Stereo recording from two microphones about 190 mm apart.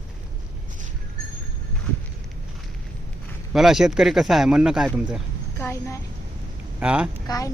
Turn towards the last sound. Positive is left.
turn(degrees=20)  # may be behind; listen again after turning